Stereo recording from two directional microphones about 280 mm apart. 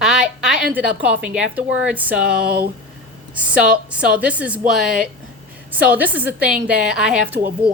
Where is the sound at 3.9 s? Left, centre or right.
Centre.